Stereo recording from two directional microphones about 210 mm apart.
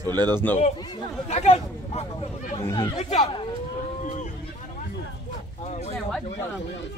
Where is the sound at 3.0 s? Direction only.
25° left (ahead or behind).